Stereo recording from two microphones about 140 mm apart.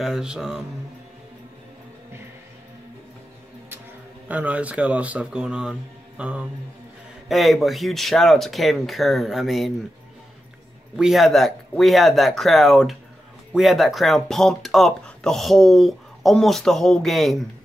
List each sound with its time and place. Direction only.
0.0 s speech: 5° right (ahead or behind)
4.3 s speech: 10° right (ahead or behind)
11.0 s speech: centre (ahead or behind)